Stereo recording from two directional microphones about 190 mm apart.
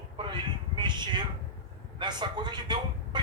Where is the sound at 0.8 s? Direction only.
25° right (ahead or behind).